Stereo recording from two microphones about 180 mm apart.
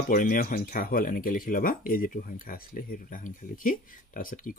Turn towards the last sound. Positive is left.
turn(degrees=50)  # may be behind; listen again after turning